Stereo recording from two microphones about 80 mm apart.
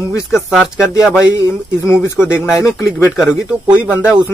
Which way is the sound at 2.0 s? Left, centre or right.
Left.